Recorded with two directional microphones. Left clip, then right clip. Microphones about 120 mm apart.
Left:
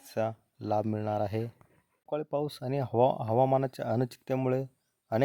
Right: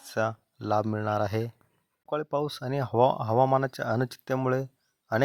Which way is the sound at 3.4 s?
10° left (ahead or behind).